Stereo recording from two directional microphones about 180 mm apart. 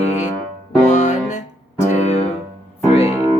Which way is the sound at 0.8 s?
40° left (ahead or behind).